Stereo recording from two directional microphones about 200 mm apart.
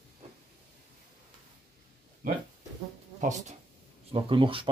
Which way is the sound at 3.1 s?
35° right (ahead or behind).